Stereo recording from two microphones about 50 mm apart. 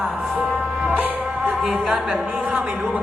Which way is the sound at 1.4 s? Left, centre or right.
Centre.